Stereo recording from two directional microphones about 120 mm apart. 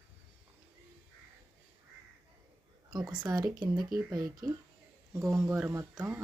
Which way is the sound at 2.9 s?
35° right (ahead or behind).